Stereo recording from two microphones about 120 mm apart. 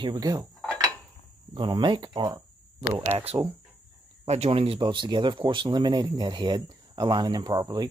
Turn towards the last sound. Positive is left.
turn(degrees=-35)  # may be behind; listen again after turning